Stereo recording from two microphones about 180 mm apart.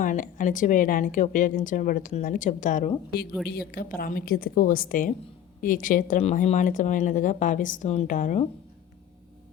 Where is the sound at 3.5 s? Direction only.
60° left (ahead or behind).